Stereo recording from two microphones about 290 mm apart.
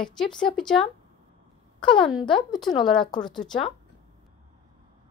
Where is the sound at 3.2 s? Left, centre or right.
Centre.